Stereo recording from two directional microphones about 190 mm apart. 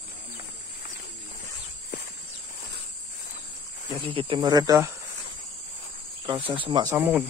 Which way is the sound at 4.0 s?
25° right (ahead or behind).